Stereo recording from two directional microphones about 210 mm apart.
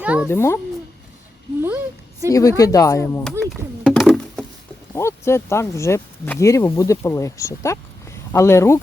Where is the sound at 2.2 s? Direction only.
15° left (ahead or behind).